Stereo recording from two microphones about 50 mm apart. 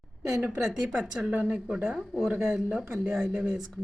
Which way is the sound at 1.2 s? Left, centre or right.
Right.